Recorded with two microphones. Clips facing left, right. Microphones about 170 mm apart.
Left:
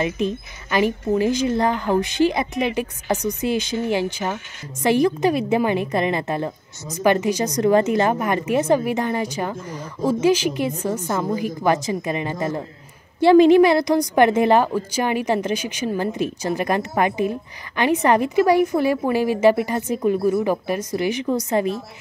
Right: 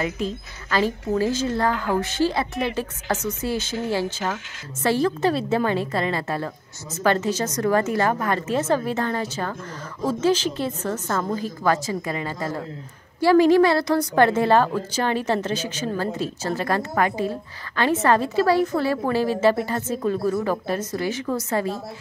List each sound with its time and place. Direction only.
0.0 s a woman's voice: 20° left (ahead or behind)